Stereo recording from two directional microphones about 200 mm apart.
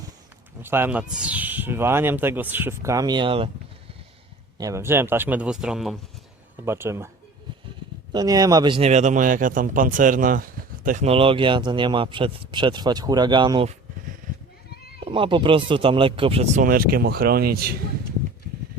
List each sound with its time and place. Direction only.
0.6 s speech: 10° right (ahead or behind); by 3.5 s 25° right (ahead or behind)
4.5 s speech: 15° right (ahead or behind)
8.1 s speech: 20° right (ahead or behind)
15.0 s speech: 25° right (ahead or behind)
16.6 s speech: 45° right (ahead or behind)